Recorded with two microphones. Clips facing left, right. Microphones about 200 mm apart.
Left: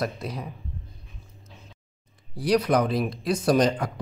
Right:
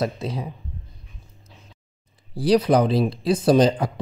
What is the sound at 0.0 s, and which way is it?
Speech, 30° right (ahead or behind).